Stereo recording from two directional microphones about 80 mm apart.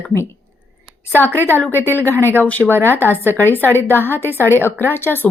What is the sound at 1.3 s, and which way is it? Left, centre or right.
Speech, right.